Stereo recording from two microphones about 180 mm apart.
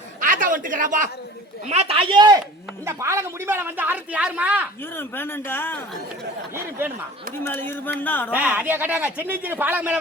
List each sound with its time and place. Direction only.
0.2 s a man's voice: 50° right (ahead or behind)
1.7 s speech: 35° right (ahead or behind); by 4.7 s 10° right (ahead or behind)
4.9 s speech: 10° left (ahead or behind)
6.5 s speech: 15° right (ahead or behind)
7.4 s speech: 10° left (ahead or behind)
8.3 s speech: 10° right (ahead or behind)